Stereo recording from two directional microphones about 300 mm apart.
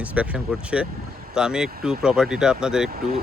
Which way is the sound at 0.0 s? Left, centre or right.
Centre.